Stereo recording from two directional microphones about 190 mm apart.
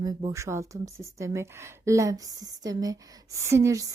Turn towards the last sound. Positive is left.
turn(degrees=-15)  # may be behind; listen again after turning